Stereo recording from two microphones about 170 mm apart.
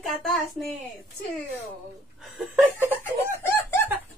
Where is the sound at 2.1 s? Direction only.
Centre (ahead or behind).